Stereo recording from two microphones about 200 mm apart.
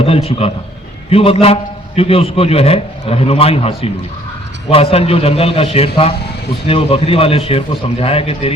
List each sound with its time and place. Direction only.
0.0 s a man's voice: 30° left (ahead or behind)